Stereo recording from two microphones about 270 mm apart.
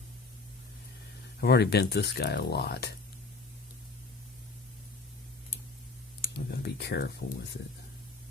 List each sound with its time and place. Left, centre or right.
1.4 s speech: left
6.5 s speech: left